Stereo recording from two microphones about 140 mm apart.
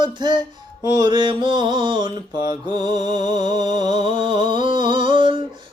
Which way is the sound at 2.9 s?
50° left (ahead or behind).